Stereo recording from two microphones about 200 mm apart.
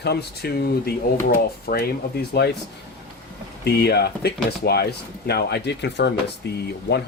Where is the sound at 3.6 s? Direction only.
55° left (ahead or behind).